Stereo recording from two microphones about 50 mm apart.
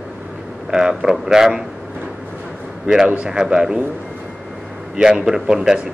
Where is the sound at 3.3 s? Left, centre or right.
Centre.